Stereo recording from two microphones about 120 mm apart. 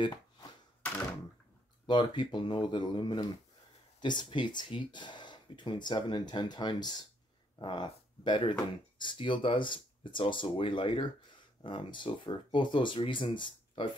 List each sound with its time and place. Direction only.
1.9 s speech: 40° left (ahead or behind)